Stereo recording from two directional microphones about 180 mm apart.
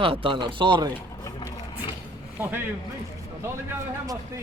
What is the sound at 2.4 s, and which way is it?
Speech, 10° right (ahead or behind).